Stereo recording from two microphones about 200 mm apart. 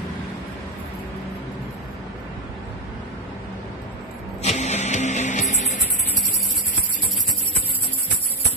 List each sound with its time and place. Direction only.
4.4 s music: 35° left (ahead or behind)